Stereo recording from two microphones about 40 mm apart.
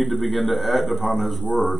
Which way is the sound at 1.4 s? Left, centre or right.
Left.